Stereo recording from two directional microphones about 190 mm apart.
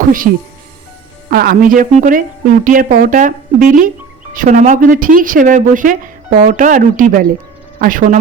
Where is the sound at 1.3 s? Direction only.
50° right (ahead or behind).